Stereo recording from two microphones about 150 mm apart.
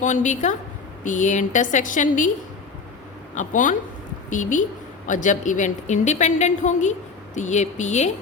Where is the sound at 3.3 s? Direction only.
55° left (ahead or behind).